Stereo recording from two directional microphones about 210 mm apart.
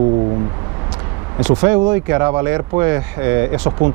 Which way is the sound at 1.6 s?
15° right (ahead or behind).